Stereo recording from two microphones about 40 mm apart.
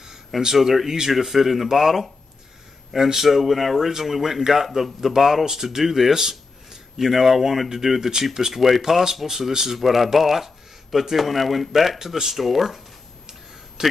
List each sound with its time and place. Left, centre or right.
0.4 s speech: centre
4.6 s speech: centre
13.8 s a man's voice: centre